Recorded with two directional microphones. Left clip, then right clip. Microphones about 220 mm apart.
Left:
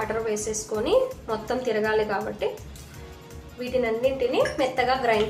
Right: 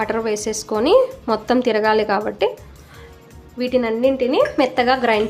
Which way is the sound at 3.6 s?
50° right (ahead or behind).